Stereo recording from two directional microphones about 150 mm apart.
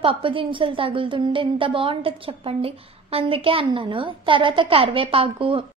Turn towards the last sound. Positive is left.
turn(degrees=-35)  # may be behind; listen again after turning